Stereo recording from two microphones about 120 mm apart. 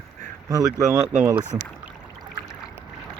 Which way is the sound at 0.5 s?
30° right (ahead or behind).